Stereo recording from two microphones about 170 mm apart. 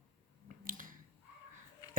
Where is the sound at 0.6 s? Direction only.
55° right (ahead or behind).